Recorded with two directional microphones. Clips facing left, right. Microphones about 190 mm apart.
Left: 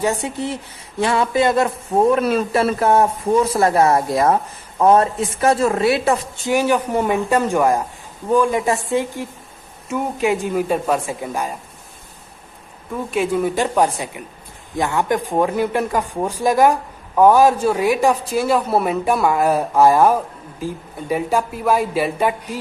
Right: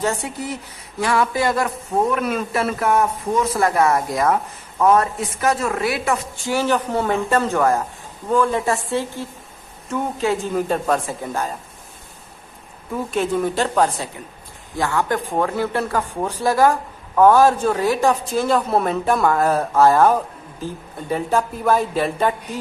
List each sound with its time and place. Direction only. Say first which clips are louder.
0.0 s a woman's voice: left 2 dB; 15° left (ahead or behind)
0.3 s a woman's voice: left 3 dB; 25° left (ahead or behind)
12.9 s a woman's voice: left 1 dB; centre (ahead or behind)